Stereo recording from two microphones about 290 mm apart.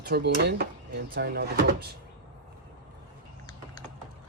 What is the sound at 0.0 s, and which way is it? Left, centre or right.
Speech, right.